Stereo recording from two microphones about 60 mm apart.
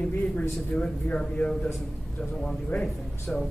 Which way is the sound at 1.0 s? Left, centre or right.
Left.